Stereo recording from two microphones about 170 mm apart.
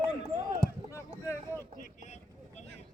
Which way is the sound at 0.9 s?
15° left (ahead or behind).